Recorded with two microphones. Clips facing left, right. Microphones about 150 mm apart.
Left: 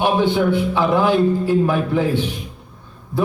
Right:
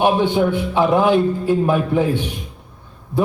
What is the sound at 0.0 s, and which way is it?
A man's voice, 15° right (ahead or behind).